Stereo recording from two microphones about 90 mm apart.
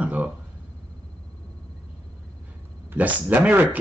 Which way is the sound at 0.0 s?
15° right (ahead or behind).